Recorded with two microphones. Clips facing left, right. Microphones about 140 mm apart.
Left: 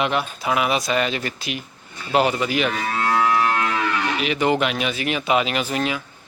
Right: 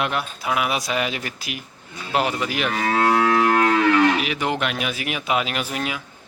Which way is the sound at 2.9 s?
60° right (ahead or behind).